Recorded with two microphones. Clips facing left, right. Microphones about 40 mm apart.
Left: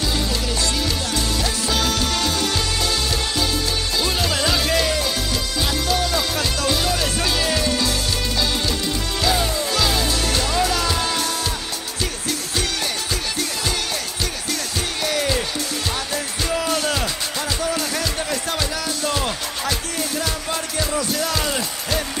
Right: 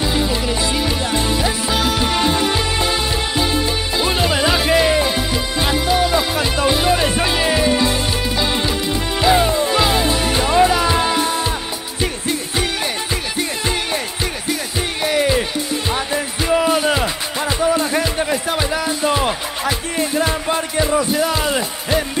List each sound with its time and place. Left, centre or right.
0.0 s music: right
14.5 s music: centre